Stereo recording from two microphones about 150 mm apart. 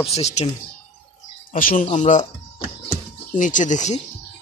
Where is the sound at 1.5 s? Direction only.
65° left (ahead or behind).